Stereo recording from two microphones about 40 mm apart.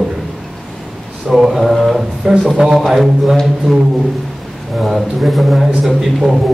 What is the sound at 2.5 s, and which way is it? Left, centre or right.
Speech, centre.